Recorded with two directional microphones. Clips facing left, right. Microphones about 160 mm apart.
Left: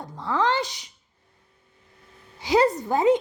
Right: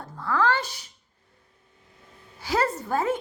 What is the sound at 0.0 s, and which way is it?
Speech, 20° left (ahead or behind).